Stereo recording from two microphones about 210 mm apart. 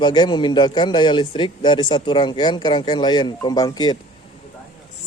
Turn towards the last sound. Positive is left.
turn(degrees=20)  # may be behind; listen again after turning